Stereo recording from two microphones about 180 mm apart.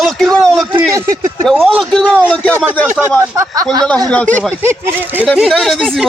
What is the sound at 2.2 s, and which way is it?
Speech, 5° left (ahead or behind).